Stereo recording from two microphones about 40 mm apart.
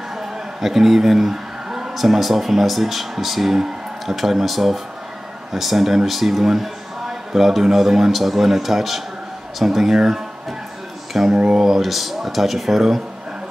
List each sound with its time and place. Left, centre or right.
0.6 s a man's voice: centre
11.8 s a man's voice: centre